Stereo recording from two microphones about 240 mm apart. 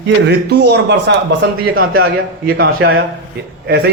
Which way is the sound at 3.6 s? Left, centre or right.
Right.